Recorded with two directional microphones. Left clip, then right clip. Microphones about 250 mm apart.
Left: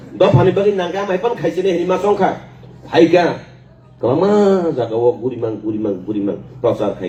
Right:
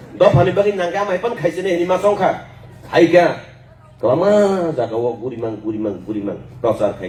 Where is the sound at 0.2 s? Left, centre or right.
Left.